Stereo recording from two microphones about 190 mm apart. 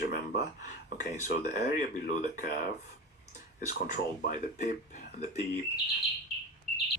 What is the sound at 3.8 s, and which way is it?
Speech, 40° left (ahead or behind).